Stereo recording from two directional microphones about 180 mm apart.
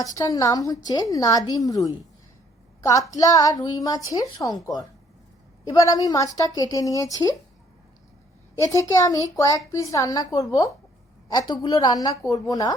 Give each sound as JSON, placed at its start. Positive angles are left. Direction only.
{"t": 0.0, "sound": "a woman's voice", "side_deg": 20}
{"t": 3.1, "sound": "a woman's voice", "side_deg": 20}
{"t": 5.6, "sound": "a woman's voice", "side_deg": 20}
{"t": 8.6, "sound": "a child's voice", "side_deg": 20}